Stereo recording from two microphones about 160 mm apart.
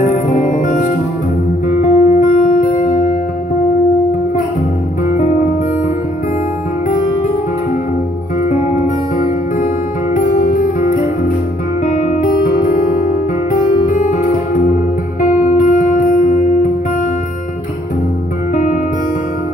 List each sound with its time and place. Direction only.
0.0 s music: 55° left (ahead or behind)
10.1 s music: 55° left (ahead or behind)
18.5 s music: 55° left (ahead or behind)